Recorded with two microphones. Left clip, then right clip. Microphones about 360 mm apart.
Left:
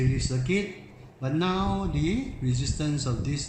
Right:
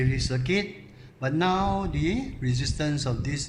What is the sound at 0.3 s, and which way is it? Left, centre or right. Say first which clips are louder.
Speech: right 1 dB; right.